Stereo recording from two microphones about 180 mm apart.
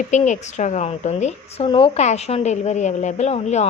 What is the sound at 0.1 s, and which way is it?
A woman's voice, 40° left (ahead or behind).